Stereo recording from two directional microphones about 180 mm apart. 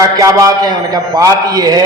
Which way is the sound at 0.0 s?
20° right (ahead or behind).